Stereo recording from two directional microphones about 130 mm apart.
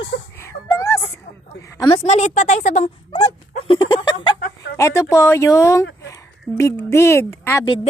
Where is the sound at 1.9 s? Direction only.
55° left (ahead or behind).